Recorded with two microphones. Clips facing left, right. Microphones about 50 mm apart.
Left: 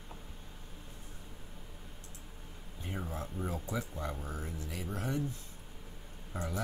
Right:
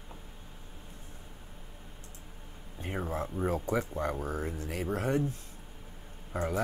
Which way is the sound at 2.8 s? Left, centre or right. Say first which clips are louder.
Right 6 dB; right.